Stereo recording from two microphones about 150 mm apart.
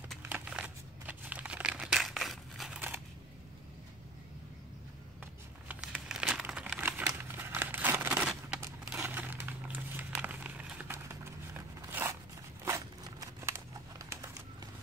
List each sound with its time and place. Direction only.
0.3 s crumpling: 10° right (ahead or behind)
5.7 s crumpling: 5° right (ahead or behind)